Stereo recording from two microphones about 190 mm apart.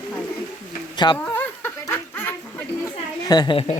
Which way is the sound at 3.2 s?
20° left (ahead or behind).